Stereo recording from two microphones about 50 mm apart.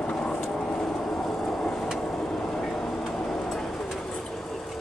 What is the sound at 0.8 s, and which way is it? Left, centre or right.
Vehicle, centre.